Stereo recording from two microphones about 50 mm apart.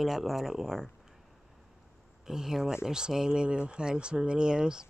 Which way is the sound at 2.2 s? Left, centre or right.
Centre.